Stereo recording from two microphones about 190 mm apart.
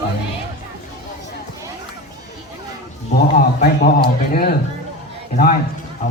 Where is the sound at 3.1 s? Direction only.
55° left (ahead or behind).